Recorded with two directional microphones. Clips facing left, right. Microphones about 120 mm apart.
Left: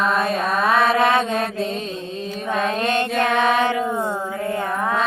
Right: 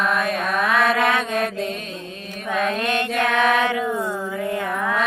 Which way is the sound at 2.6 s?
30° left (ahead or behind).